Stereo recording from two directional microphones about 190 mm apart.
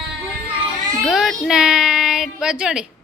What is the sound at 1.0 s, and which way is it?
Speech, centre (ahead or behind).